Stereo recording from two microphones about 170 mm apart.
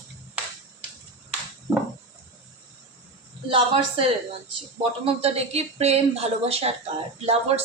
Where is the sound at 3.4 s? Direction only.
30° right (ahead or behind).